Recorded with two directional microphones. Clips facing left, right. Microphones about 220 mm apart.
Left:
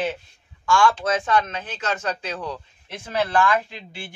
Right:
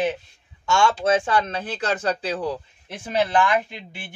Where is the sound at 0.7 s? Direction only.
25° right (ahead or behind).